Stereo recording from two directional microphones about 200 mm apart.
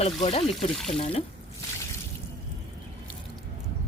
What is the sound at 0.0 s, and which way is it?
A woman's voice, 30° left (ahead or behind).